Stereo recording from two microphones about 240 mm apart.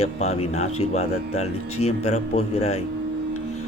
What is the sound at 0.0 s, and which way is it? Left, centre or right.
Speech, left.